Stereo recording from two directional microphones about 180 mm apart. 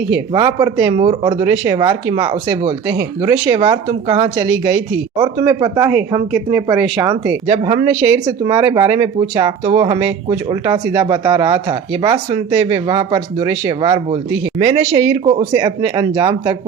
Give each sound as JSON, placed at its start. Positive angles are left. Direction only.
{"t": 0.3, "sound": "speech", "side_deg": -20}
{"t": 6.3, "sound": "speech", "side_deg": -10}
{"t": 7.9, "sound": "speech", "side_deg": -15}
{"t": 15.2, "sound": "speech", "side_deg": -35}
{"t": 15.5, "sound": "speech", "side_deg": -20}